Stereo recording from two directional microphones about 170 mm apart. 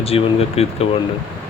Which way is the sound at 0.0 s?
35° left (ahead or behind).